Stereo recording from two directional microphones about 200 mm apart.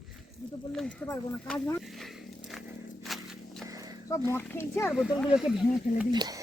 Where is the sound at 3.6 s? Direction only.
20° right (ahead or behind).